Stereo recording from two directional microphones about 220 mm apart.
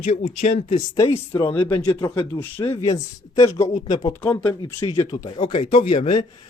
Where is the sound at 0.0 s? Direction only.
30° left (ahead or behind).